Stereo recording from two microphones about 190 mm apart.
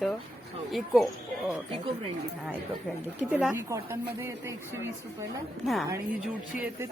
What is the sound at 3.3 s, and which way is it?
Speech, 10° right (ahead or behind).